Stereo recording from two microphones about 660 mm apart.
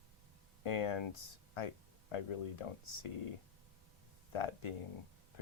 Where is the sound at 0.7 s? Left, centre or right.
Left.